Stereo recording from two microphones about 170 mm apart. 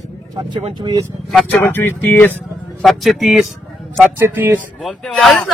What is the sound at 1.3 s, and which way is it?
Speech, 10° left (ahead or behind).